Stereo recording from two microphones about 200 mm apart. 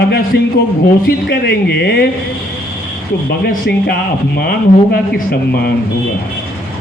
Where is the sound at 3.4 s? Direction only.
50° left (ahead or behind).